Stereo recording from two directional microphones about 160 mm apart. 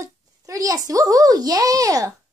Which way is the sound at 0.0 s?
20° right (ahead or behind).